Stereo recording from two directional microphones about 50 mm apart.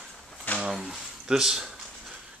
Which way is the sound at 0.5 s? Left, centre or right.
Centre.